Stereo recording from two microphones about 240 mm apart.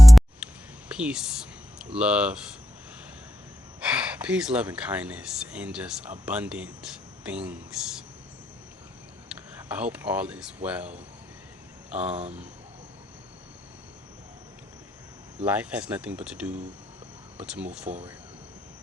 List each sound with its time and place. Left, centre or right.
0.0 s music: centre
0.9 s speech: centre
3.8 s speech: centre
9.6 s speech: centre
12.0 s speech: right
15.4 s speech: centre
17.8 s speech: right